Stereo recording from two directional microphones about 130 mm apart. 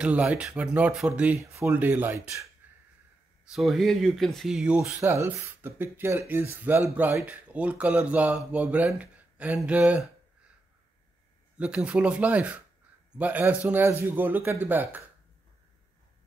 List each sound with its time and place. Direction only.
0.0 s speech: 10° right (ahead or behind)
1.4 s speech: 20° right (ahead or behind)
2.6 s a sound: 15° right (ahead or behind)
3.5 s speech: centre (ahead or behind)
4.8 s speech: 20° right (ahead or behind)
11.5 s speech: 10° right (ahead or behind)